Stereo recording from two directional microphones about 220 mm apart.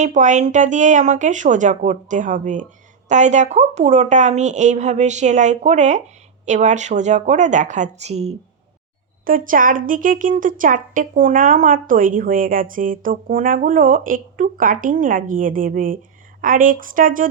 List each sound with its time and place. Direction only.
0.0 s speech: 35° right (ahead or behind)